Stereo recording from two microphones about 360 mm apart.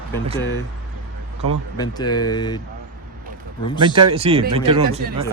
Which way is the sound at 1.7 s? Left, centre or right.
Centre.